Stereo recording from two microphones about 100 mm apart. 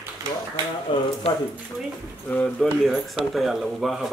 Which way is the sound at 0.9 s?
55° left (ahead or behind).